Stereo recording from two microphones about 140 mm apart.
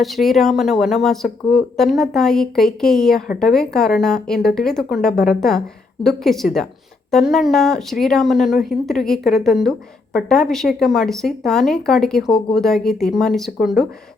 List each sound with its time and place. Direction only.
0.0 s a woman's voice: centre (ahead or behind)